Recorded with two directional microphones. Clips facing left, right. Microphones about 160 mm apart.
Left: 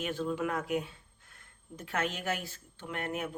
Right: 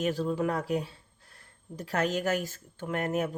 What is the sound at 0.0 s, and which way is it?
Speech, 35° right (ahead or behind).